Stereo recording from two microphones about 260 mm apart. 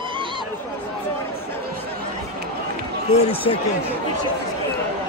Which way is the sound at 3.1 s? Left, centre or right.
Left.